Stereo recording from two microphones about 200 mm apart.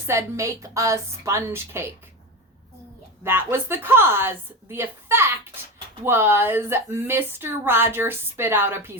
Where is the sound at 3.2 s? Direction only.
10° right (ahead or behind).